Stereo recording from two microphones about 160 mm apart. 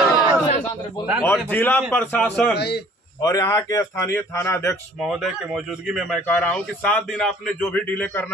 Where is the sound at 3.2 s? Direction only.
25° left (ahead or behind).